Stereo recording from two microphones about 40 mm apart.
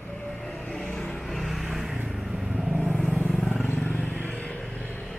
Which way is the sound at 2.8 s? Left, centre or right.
Centre.